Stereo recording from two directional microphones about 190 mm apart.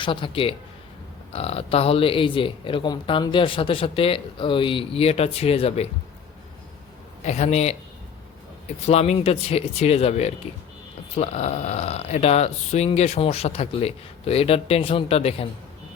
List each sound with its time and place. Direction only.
0.0 s speech: 25° left (ahead or behind)
7.3 s speech: 35° left (ahead or behind)
8.9 s speech: 35° left (ahead or behind)